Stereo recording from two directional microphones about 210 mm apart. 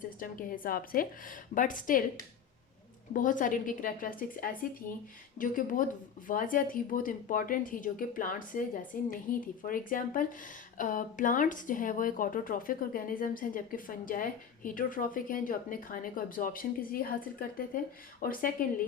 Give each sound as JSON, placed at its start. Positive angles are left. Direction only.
{"t": 0.2, "sound": "speech", "side_deg": 40}
{"t": 3.1, "sound": "speech", "side_deg": 40}
{"t": 18.2, "sound": "speech", "side_deg": 40}